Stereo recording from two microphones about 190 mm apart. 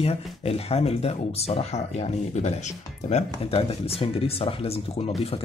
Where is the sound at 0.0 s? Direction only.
30° left (ahead or behind).